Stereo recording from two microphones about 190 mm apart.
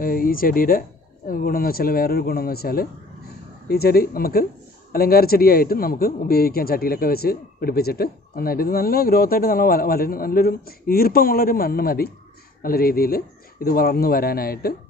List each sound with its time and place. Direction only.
0.0 s a man's voice: 50° left (ahead or behind)